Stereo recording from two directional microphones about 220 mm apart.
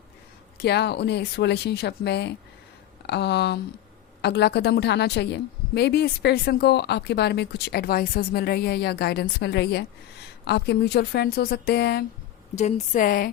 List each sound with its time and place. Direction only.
0.6 s a woman's voice: 50° left (ahead or behind)
12.5 s speech: 35° left (ahead or behind)